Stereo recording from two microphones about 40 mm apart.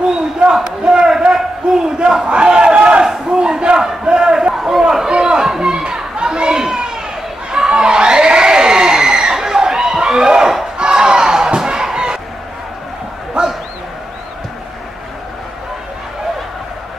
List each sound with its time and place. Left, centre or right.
0.7 s battle cry: centre
1.8 s speech: centre
3.3 s battle cry: right
5.4 s chatter: centre
6.6 s children playing: centre
7.5 s crowd: centre
10.8 s chicken: centre
13.4 s bow-wow: right